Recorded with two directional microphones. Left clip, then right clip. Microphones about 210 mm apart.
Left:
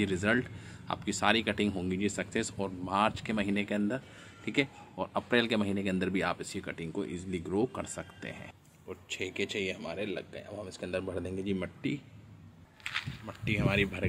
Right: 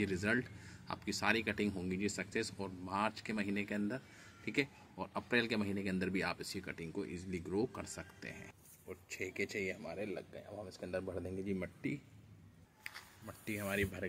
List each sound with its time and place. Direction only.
0.0 s speech: centre (ahead or behind)
13.5 s speech: centre (ahead or behind)